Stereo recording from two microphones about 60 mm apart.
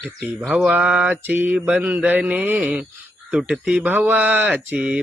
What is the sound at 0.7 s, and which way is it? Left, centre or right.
Mantra, centre.